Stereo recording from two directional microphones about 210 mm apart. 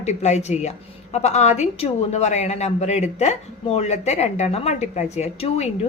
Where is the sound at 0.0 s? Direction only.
30° left (ahead or behind).